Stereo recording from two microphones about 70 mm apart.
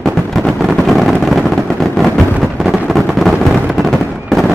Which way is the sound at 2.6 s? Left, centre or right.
Centre.